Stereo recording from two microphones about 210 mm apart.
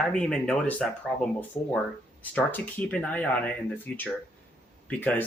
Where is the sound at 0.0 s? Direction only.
5° left (ahead or behind).